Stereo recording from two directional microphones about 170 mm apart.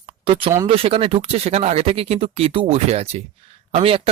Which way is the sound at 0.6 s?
35° right (ahead or behind).